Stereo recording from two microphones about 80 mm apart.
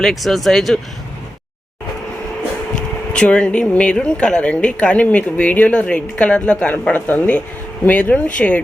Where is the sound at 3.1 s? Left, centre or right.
Centre.